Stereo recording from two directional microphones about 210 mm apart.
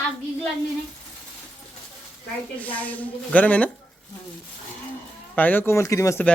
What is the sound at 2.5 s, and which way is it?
A man's voice, 5° left (ahead or behind).